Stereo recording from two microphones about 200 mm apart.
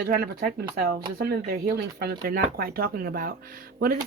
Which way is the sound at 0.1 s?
45° right (ahead or behind).